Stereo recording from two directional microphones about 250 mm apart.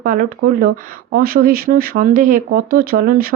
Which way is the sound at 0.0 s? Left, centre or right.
Right.